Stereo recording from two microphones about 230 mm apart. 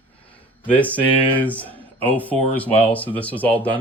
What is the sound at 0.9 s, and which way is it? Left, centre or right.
Speech, centre.